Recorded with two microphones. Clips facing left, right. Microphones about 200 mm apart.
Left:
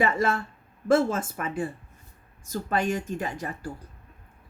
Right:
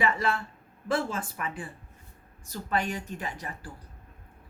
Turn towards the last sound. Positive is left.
turn(degrees=45)  # may be behind; listen again after turning